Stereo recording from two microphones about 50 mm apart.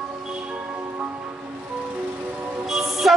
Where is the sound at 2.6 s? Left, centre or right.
Centre.